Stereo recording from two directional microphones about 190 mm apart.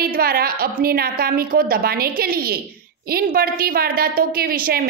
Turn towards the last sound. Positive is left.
turn(degrees=-50)  # may be behind; listen again after turning